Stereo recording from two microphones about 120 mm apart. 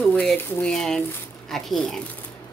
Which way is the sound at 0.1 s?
5° left (ahead or behind).